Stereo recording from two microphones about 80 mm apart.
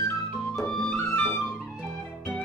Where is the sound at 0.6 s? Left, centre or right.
Centre.